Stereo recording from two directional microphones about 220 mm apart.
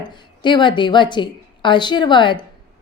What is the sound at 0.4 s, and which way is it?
A woman's voice, 20° left (ahead or behind).